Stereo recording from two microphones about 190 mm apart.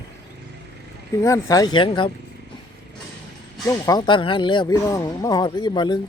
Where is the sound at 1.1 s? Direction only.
15° left (ahead or behind).